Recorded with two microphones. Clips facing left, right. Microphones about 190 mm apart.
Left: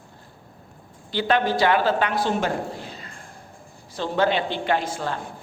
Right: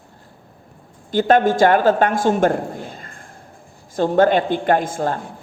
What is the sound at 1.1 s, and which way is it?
A woman's voice, 45° right (ahead or behind).